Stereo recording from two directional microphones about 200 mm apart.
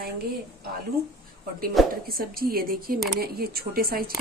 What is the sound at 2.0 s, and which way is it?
A woman's voice, 50° right (ahead or behind).